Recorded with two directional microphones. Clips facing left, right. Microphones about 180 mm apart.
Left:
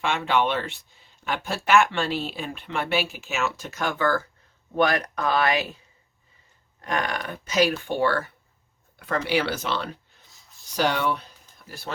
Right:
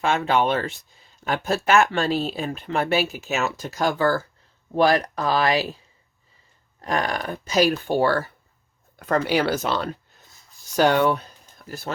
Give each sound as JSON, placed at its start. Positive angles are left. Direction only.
{"t": 0.0, "sound": "speech", "side_deg": -40}
{"t": 6.8, "sound": "speech", "side_deg": -35}
{"t": 9.0, "sound": "a sound", "side_deg": -40}